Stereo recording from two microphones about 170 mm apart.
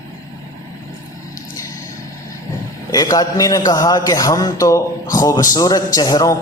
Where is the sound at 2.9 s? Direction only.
20° left (ahead or behind).